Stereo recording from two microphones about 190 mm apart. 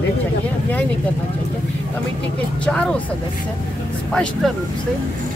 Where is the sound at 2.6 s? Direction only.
5° left (ahead or behind).